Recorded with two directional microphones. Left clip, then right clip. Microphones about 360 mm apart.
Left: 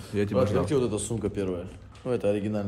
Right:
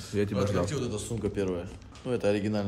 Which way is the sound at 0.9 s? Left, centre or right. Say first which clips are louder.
Left 4 dB; centre.